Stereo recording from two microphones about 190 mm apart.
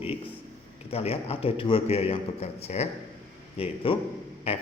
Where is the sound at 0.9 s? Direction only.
30° left (ahead or behind).